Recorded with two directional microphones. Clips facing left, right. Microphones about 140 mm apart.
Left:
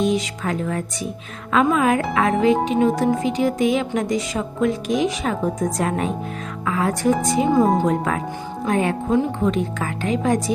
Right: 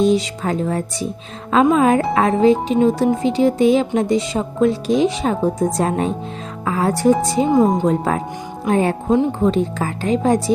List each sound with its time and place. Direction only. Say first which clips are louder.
0.0 s speech: right 4 dB; 30° right (ahead or behind)